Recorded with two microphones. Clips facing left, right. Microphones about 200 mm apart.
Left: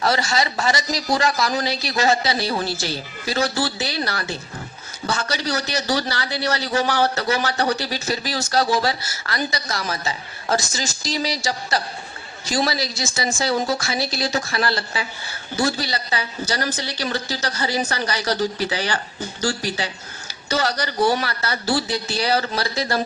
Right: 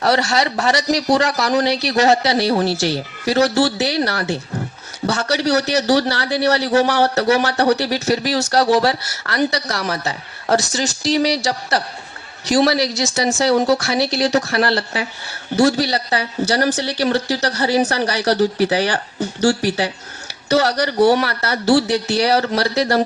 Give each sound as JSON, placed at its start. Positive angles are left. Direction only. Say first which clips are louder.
{"t": 0.0, "sound": "speech", "louder": "right 4 dB", "side_deg": -70}